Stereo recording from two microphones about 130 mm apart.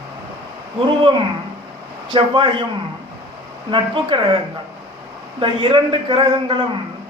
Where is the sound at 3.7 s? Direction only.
40° right (ahead or behind).